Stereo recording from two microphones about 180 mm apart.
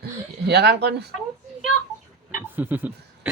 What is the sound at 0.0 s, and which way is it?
Speech, 65° right (ahead or behind).